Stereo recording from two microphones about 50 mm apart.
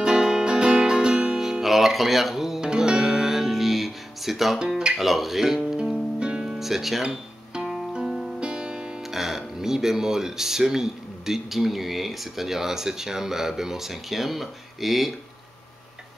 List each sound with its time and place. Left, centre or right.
0.0 s music: centre
1.4 s music: centre
2.6 s music: centre
4.6 s speech: centre
4.9 s speech: centre
5.7 s music: centre
8.4 s speech: centre